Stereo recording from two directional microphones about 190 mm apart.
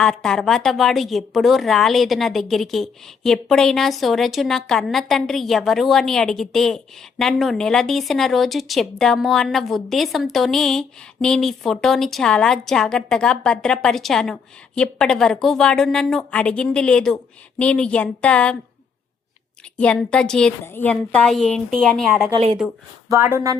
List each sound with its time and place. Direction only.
0.0 s a woman's voice: 5° left (ahead or behind)
19.7 s a woman's voice: 5° left (ahead or behind)
23.0 s speech: 15° right (ahead or behind)